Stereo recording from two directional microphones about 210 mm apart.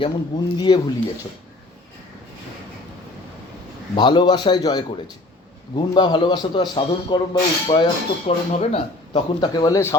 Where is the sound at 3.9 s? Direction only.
20° left (ahead or behind).